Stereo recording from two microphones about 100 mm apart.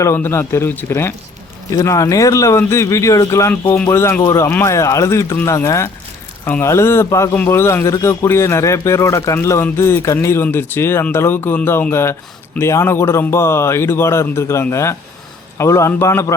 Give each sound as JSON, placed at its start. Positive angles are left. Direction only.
{"t": 0.0, "sound": "speech", "side_deg": 25}
{"t": 3.5, "sound": "speech", "side_deg": 15}
{"t": 3.8, "sound": "speech", "side_deg": 25}